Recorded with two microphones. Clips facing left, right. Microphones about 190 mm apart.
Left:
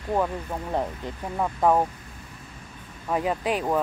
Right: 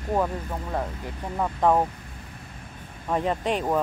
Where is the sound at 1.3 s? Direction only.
Centre (ahead or behind).